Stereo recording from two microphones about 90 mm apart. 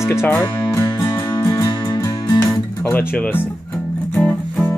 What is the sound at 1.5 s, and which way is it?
Music, 40° left (ahead or behind).